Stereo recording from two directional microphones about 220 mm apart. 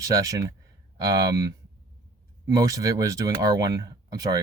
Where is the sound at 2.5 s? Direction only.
15° right (ahead or behind).